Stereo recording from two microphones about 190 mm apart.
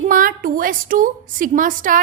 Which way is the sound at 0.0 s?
45° right (ahead or behind).